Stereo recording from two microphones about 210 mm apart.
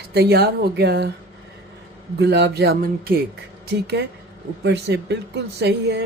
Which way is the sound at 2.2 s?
55° right (ahead or behind).